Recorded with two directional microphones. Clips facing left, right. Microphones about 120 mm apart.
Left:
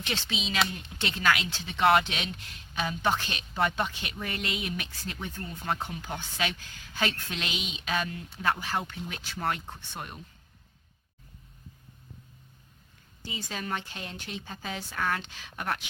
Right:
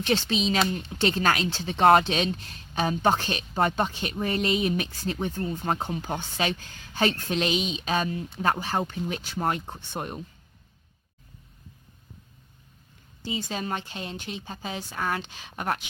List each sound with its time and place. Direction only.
0.0 s a woman's voice: 40° right (ahead or behind)
13.2 s speech: 30° right (ahead or behind)